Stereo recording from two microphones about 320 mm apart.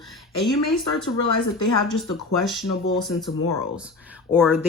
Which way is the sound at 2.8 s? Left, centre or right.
Left.